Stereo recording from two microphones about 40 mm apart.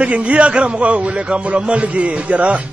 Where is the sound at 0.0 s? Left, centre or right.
Right.